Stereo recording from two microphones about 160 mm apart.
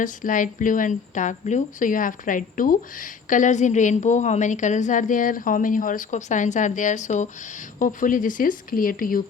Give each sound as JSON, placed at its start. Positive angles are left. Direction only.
{"t": 0.0, "sound": "a woman's voice", "side_deg": 55}